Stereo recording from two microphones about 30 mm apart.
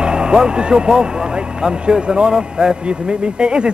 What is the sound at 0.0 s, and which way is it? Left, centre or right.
Speech, right.